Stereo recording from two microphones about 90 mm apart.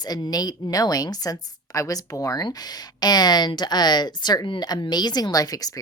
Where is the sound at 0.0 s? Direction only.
50° left (ahead or behind).